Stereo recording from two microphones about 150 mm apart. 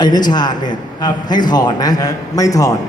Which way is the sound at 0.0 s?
30° left (ahead or behind).